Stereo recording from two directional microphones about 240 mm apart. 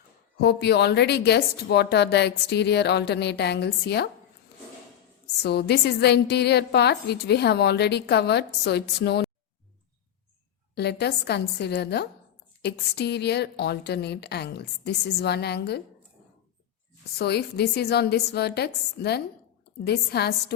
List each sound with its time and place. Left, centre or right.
0.3 s a woman's voice: left
5.4 s a woman's voice: left
10.8 s a woman's voice: left
17.2 s a woman's voice: left